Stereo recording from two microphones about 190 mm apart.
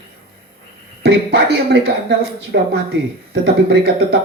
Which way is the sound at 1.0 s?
55° right (ahead or behind).